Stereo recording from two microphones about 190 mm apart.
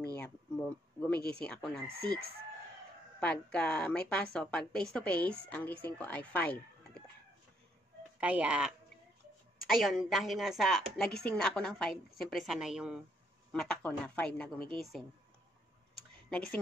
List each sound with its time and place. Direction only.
0.1 s a sound: 5° left (ahead or behind)
1.3 s a woman's voice: 5° left (ahead or behind)
2.1 s chicken: 55° right (ahead or behind)
3.2 s a woman's voice: 5° left (ahead or behind)
8.2 s a woman's voice: 5° right (ahead or behind)
15.9 s tick-tock: 5° left (ahead or behind)